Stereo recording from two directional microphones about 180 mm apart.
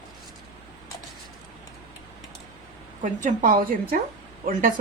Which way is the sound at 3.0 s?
45° right (ahead or behind).